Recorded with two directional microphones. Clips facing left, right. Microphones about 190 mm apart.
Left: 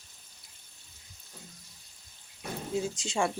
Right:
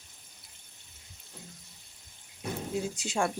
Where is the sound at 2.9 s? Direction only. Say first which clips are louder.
Right 1 dB; 65° right (ahead or behind).